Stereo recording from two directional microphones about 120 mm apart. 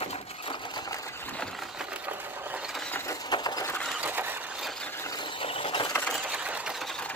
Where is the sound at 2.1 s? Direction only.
15° right (ahead or behind).